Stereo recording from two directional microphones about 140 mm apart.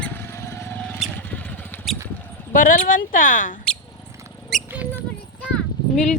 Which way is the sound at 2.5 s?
75° left (ahead or behind).